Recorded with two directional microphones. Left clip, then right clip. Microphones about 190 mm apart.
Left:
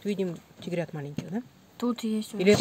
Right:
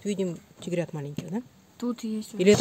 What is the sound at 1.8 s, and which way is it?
Speech, 35° left (ahead or behind).